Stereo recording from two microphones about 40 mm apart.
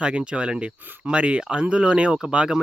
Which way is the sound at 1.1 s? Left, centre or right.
Right.